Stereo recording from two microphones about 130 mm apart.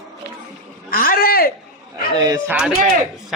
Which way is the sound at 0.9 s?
90° left.